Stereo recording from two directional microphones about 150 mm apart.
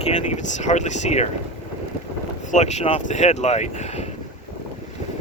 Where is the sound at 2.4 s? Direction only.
50° left (ahead or behind).